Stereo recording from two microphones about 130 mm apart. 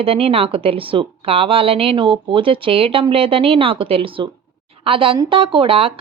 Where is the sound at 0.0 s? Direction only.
45° right (ahead or behind).